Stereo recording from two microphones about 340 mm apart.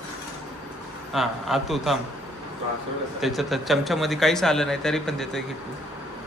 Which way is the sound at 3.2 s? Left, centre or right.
Centre.